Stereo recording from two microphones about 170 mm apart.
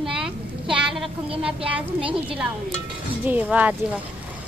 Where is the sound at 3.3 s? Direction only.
10° right (ahead or behind).